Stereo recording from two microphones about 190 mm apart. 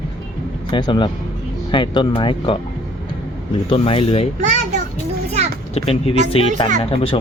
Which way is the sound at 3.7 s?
30° left (ahead or behind).